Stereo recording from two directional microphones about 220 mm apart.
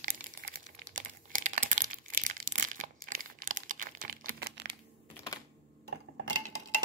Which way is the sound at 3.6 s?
40° right (ahead or behind).